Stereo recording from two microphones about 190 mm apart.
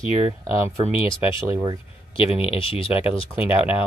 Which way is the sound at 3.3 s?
10° right (ahead or behind).